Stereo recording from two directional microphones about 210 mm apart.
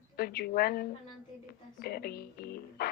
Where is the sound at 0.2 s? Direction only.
50° left (ahead or behind).